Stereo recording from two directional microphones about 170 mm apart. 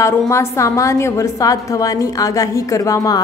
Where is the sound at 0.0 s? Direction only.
15° left (ahead or behind).